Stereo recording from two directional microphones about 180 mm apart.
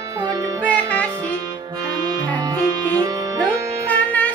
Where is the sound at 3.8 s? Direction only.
10° left (ahead or behind).